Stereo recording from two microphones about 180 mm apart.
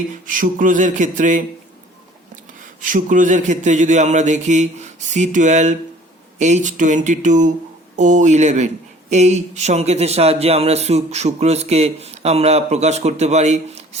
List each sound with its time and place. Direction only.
0.3 s speech: 50° right (ahead or behind)
2.8 s speech: 45° right (ahead or behind)